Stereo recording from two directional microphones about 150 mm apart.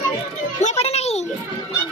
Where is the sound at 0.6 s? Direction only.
45° left (ahead or behind).